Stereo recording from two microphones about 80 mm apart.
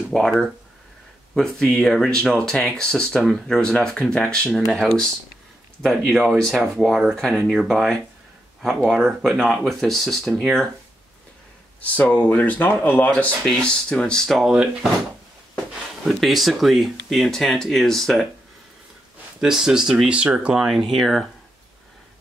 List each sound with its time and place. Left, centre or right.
0.1 s speech: centre
1.3 s speech: centre
11.8 s speech: centre
14.4 s speech: centre
16.1 s speech: centre
19.4 s speech: centre